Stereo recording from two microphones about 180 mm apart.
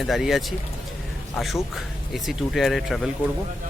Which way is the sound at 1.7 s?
Centre (ahead or behind).